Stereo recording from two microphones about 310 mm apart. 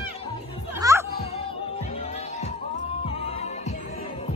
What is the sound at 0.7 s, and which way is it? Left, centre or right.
Music, centre.